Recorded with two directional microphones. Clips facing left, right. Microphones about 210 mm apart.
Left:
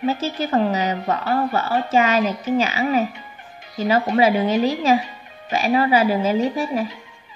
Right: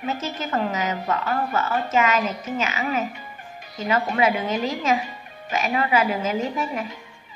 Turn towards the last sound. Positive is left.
turn(degrees=35)  # may be behind; listen again after turning